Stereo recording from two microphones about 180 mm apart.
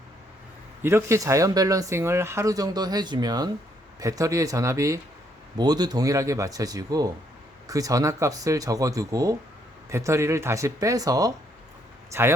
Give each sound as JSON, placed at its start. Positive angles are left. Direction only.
{"t": 0.8, "sound": "speech", "side_deg": -15}